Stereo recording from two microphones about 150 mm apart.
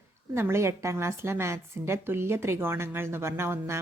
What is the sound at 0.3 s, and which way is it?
Speech, 15° right (ahead or behind).